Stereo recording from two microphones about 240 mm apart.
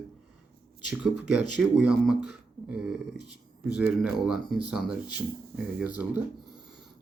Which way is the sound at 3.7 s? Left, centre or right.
Centre.